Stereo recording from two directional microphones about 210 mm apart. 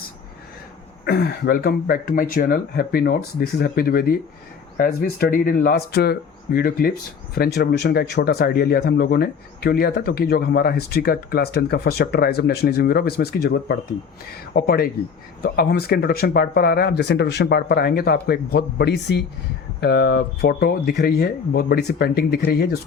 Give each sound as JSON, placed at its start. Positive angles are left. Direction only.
{"t": 1.0, "sound": "speech", "side_deg": 50}